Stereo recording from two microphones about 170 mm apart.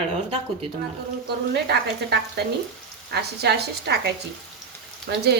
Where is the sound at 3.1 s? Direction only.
75° right (ahead or behind).